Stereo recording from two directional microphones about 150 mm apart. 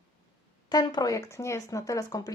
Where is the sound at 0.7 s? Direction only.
30° left (ahead or behind).